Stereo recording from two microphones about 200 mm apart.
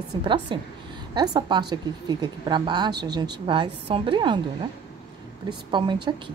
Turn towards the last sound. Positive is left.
turn(degrees=-25)  # may be behind; listen again after turning